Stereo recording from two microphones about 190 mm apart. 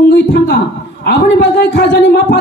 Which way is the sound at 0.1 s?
60° left (ahead or behind).